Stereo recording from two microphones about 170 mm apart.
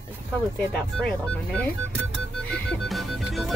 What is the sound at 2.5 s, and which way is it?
Music, 5° left (ahead or behind).